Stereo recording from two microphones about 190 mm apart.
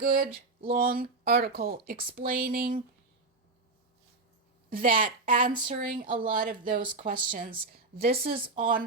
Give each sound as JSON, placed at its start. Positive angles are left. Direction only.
{"t": 0.0, "sound": "speech", "side_deg": -45}
{"t": 4.7, "sound": "speech", "side_deg": -45}
{"t": 6.0, "sound": "speech", "side_deg": -25}
{"t": 6.2, "sound": "speech", "side_deg": -50}